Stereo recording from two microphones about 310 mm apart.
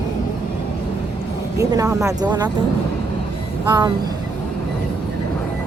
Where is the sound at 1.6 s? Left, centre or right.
Centre.